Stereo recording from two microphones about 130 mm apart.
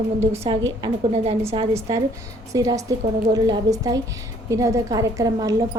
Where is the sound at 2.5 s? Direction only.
25° right (ahead or behind).